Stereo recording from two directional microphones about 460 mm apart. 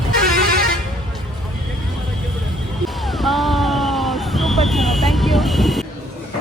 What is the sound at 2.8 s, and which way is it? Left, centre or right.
Vehicle, centre.